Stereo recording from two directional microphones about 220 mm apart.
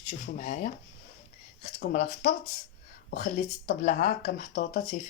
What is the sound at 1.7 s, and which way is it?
Speech, 40° left (ahead or behind).